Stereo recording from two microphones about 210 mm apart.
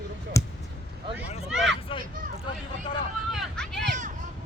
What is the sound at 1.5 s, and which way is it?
Vehicle, 5° right (ahead or behind).